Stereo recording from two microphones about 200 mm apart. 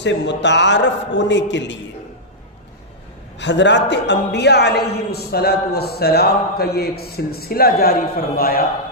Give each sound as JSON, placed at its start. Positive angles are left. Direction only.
{"t": 0.0, "sound": "a man's voice", "side_deg": 60}
{"t": 3.3, "sound": "a man's voice", "side_deg": 60}